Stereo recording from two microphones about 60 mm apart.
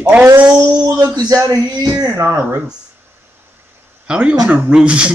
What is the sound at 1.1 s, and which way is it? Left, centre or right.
Speech, right.